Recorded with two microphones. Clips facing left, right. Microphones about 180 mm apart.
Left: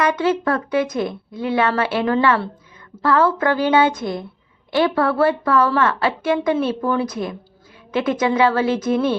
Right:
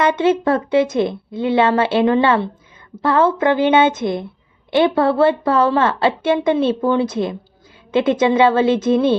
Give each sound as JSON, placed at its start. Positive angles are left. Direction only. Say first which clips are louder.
{"t": 0.0, "sound": "speech", "louder": "right 3 dB", "side_deg": -25}